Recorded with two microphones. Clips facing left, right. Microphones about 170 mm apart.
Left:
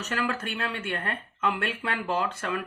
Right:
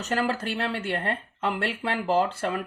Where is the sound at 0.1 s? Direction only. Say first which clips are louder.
Right 4 dB; 35° right (ahead or behind).